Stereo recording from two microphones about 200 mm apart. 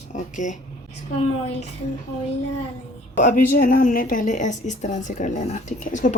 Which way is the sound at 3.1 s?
40° left (ahead or behind).